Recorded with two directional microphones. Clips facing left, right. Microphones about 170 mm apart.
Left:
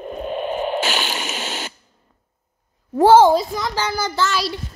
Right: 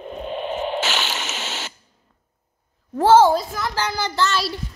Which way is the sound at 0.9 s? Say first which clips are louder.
Left 2 dB; 10° left (ahead or behind).